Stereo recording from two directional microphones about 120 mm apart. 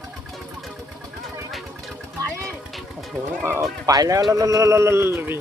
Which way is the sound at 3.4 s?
20° right (ahead or behind).